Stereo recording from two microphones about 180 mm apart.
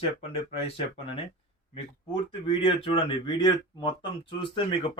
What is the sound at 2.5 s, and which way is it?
Speech, 30° left (ahead or behind).